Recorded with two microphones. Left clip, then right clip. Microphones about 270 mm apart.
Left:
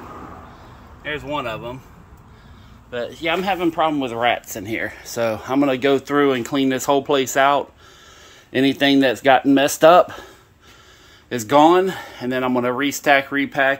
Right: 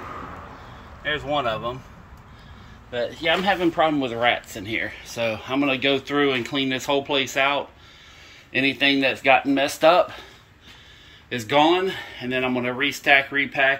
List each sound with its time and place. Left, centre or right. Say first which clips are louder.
1.0 s speech: right 2 dB; centre
2.9 s speech: even; centre